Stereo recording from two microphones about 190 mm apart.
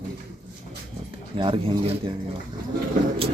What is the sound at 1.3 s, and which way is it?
Speech, 25° right (ahead or behind).